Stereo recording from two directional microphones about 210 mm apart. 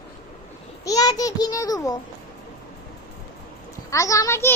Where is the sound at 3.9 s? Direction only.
15° left (ahead or behind).